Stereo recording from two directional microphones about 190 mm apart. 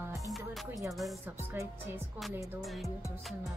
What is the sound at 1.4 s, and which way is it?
Music, 10° right (ahead or behind).